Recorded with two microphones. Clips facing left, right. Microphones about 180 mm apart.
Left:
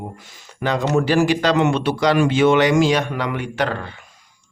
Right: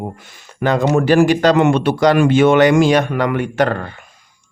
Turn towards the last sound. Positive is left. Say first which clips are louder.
# right 6 dB
turn(degrees=-50)  # may be behind; listen again after turning